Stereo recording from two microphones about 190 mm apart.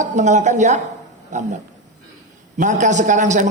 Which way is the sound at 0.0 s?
40° right (ahead or behind).